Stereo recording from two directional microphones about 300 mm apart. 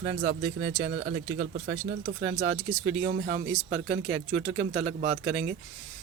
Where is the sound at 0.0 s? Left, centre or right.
Right.